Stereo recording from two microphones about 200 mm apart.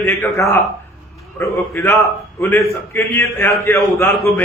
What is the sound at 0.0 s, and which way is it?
Speech, 10° left (ahead or behind).